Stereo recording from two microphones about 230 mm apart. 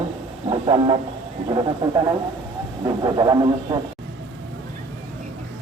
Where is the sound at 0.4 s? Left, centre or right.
Right.